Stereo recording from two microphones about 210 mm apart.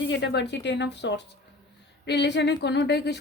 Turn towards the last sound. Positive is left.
turn(degrees=55)  # may be behind; listen again after turning